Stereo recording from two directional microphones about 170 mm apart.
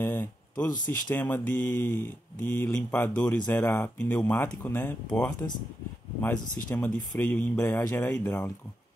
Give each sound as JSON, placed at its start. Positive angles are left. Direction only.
{"t": 0.0, "sound": "speech", "side_deg": 10}
{"t": 6.7, "sound": "speech", "side_deg": 10}